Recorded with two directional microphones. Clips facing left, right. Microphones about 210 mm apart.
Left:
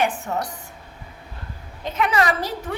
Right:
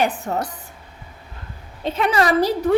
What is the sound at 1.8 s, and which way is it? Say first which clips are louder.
Speech: right 2 dB; 30° right (ahead or behind).